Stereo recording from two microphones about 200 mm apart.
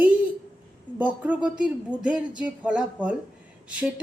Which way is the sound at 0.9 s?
10° right (ahead or behind).